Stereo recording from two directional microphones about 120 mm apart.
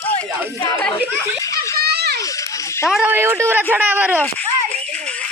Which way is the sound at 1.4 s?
25° left (ahead or behind).